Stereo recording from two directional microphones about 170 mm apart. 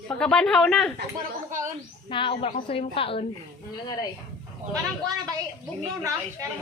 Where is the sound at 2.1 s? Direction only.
30° left (ahead or behind).